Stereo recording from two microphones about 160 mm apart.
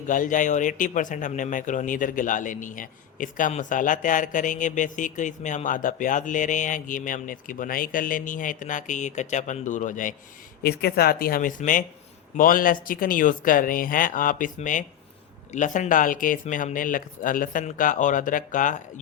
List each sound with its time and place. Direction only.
0.1 s speech: 55° left (ahead or behind)
10.6 s speech: 80° left; by 18.8 s 55° left (ahead or behind)